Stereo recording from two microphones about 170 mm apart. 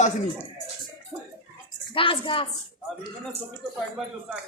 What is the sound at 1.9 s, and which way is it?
Speech, 30° left (ahead or behind).